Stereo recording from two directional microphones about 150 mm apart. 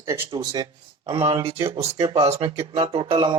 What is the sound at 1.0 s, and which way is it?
A man's voice, 40° right (ahead or behind).